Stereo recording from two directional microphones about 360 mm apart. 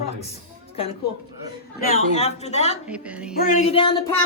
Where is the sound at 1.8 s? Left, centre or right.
Left.